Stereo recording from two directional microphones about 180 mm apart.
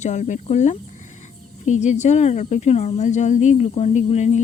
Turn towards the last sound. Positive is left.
turn(degrees=40)  # may be behind; listen again after turning